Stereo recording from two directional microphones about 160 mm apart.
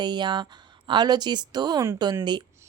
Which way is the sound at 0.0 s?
30° right (ahead or behind).